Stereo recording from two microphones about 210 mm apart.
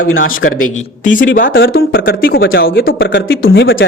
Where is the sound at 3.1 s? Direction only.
65° left (ahead or behind).